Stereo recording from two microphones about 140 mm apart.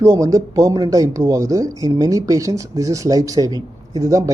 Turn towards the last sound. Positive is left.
turn(degrees=-25)  # may be behind; listen again after turning